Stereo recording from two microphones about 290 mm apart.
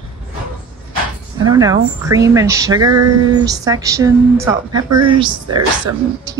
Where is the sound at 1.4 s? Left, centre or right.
Centre.